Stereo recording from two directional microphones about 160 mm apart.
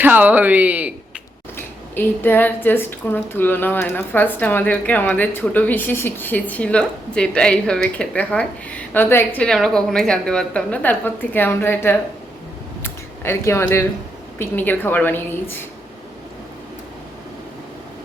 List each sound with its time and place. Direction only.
0.0 s speech: 10° right (ahead or behind)
1.5 s speech: 15° left (ahead or behind)
12.8 s a sound: 15° left (ahead or behind)
14.3 s speech: 10° left (ahead or behind)